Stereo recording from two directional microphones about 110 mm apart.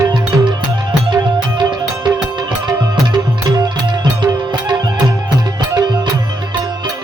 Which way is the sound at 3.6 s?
40° right (ahead or behind).